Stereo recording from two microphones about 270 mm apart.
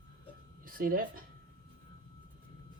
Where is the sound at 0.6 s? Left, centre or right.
Right.